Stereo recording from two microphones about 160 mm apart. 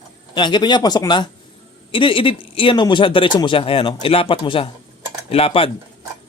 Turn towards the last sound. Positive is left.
turn(degrees=35)  # may be behind; listen again after turning